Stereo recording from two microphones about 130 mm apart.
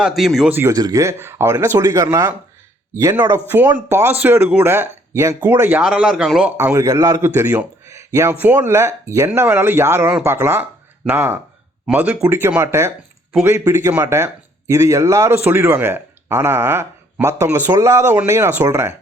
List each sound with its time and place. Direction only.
0.0 s a man's voice: centre (ahead or behind)
0.5 s speech: 20° right (ahead or behind)
3.5 s speech: 15° right (ahead or behind)
6.6 s speech: 20° right (ahead or behind)